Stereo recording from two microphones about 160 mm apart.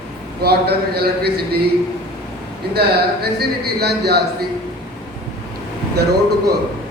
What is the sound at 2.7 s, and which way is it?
Speech, 80° right.